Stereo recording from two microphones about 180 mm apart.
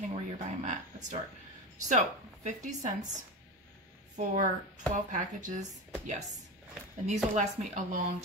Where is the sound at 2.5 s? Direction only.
40° right (ahead or behind).